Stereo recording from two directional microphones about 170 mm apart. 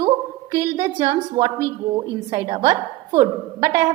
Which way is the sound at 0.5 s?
20° right (ahead or behind).